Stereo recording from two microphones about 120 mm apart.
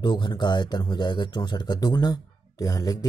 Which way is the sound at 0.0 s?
40° left (ahead or behind).